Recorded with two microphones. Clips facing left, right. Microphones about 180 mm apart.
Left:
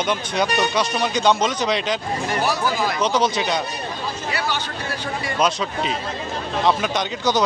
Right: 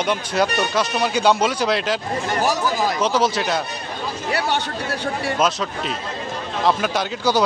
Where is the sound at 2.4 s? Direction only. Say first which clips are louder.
Right 2 dB; 40° right (ahead or behind).